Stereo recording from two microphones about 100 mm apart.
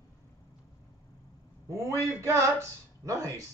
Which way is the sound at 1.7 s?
30° right (ahead or behind).